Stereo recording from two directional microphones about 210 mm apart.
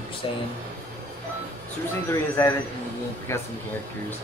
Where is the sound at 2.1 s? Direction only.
15° left (ahead or behind).